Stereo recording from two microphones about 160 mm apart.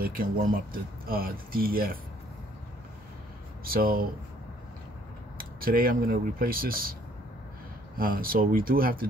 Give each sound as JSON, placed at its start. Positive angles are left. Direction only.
{"t": 0.0, "sound": "speech", "side_deg": -65}
{"t": 3.6, "sound": "speech", "side_deg": -65}
{"t": 5.4, "sound": "speech", "side_deg": -65}
{"t": 8.0, "sound": "speech", "side_deg": -65}